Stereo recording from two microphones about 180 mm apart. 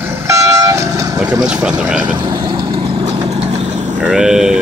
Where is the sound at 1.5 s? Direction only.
5° right (ahead or behind).